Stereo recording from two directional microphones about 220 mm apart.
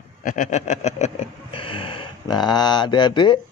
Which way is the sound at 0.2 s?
35° left (ahead or behind).